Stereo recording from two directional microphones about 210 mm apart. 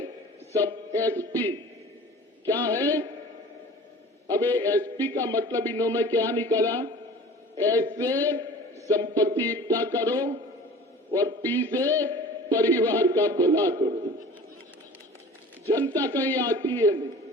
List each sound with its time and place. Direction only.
0.5 s a man's voice: 15° right (ahead or behind)
2.5 s a man's voice: 15° right (ahead or behind)
4.3 s a man's voice: 15° right (ahead or behind)
8.9 s a sound: 20° right (ahead or behind)
9.6 s a man's voice: 15° right (ahead or behind)
11.4 s a man's voice: 10° left (ahead or behind)
11.7 s a man's voice: 15° right (ahead or behind)
15.7 s a man's voice: 15° right (ahead or behind)